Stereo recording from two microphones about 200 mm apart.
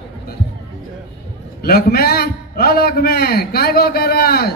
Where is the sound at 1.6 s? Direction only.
50° left (ahead or behind).